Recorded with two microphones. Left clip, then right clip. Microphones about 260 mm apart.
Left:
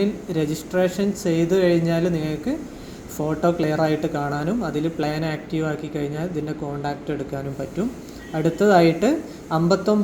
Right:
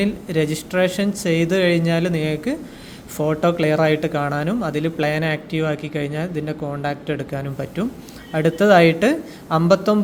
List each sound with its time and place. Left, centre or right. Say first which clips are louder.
0.0 s speech: right 2 dB; right